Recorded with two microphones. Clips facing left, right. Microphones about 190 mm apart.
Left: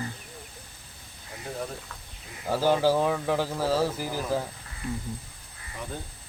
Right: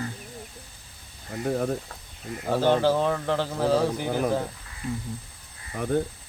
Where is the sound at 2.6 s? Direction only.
5° left (ahead or behind).